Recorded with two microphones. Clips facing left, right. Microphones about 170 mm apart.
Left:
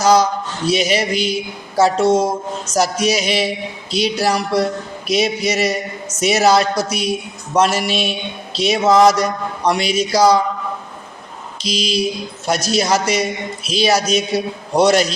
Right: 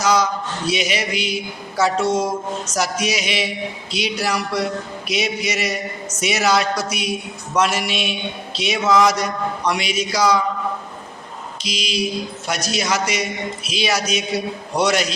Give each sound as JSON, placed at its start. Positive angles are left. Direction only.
{"t": 0.0, "sound": "a man's voice", "side_deg": 30}
{"t": 11.7, "sound": "a man's voice", "side_deg": 35}